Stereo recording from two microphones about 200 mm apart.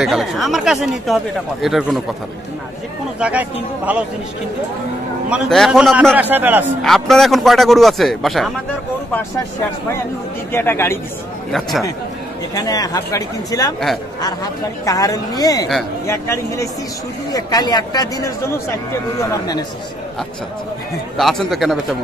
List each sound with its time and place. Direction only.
0.0 s speech: centre (ahead or behind)
3.2 s a man's voice: 5° right (ahead or behind)
5.3 s a man's voice: centre (ahead or behind)
6.8 s speech: centre (ahead or behind)
10.5 s speech: 10° left (ahead or behind)
12.5 s speech: 20° left (ahead or behind)
21.2 s speech: centre (ahead or behind)